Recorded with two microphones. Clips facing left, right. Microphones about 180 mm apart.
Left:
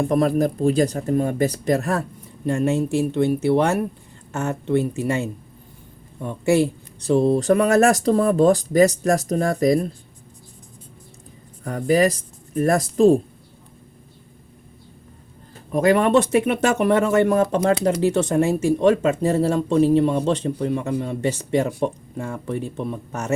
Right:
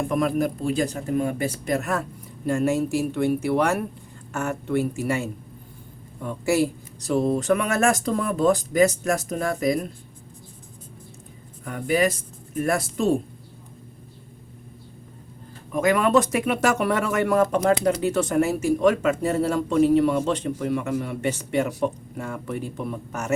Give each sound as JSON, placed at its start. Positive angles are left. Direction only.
{"t": 0.0, "sound": "speech", "side_deg": 35}
{"t": 2.5, "sound": "speech", "side_deg": 25}
{"t": 11.6, "sound": "speech", "side_deg": 35}
{"t": 15.7, "sound": "speech", "side_deg": 35}